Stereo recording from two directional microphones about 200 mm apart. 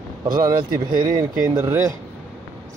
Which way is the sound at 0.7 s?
20° right (ahead or behind).